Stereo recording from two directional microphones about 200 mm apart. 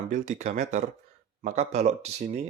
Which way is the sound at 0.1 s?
35° right (ahead or behind).